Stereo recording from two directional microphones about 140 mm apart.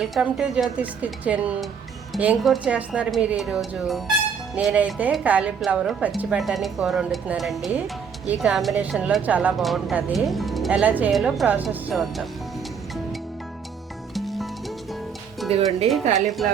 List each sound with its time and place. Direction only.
0.0 s a woman's voice: 5° right (ahead or behind)
2.4 s a woman's voice: centre (ahead or behind)
10.7 s a woman's voice: 10° right (ahead or behind)
11.1 s a woman's voice: centre (ahead or behind)
14.1 s music: centre (ahead or behind)
15.4 s speech: 45° right (ahead or behind)
16.0 s speech: 60° right (ahead or behind)